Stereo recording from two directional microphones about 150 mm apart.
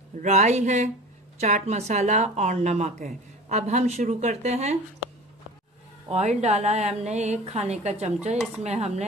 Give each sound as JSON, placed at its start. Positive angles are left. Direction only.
{"t": 0.2, "sound": "a woman's voice", "side_deg": -50}
{"t": 6.0, "sound": "a woman's voice", "side_deg": -50}